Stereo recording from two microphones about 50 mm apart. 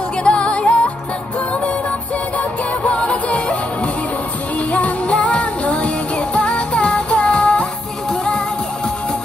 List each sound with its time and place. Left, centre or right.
0.2 s music: left
2.3 s music: left